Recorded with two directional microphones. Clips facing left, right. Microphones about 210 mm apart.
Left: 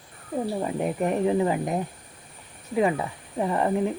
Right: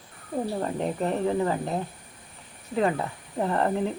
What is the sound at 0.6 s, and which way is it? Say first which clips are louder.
Speech: left 2 dB; 10° left (ahead or behind).